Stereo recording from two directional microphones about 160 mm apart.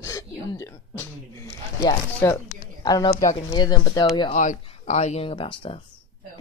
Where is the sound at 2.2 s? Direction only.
20° left (ahead or behind).